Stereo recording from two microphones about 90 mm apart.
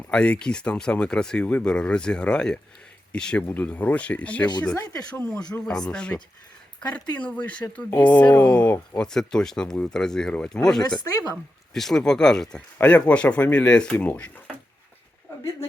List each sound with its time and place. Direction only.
0.1 s speech: 10° left (ahead or behind)